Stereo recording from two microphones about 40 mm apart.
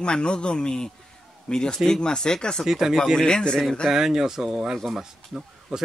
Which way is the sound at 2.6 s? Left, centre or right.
Centre.